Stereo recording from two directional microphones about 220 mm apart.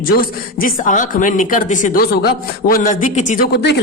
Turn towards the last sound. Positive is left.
turn(degrees=50)  # may be behind; listen again after turning